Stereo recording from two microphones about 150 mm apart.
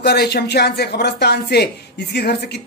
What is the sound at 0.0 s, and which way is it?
Speech, 90° left.